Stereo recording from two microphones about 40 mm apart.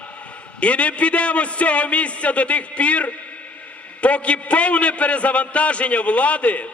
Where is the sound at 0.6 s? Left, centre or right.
Left.